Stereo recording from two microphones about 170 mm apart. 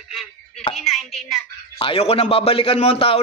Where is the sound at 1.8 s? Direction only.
35° left (ahead or behind).